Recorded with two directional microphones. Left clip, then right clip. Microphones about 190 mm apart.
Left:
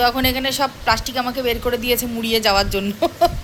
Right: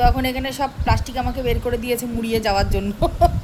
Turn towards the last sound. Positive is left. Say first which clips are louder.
# left 1 dB
turn(degrees=-5)  # may be behind; listen again after turning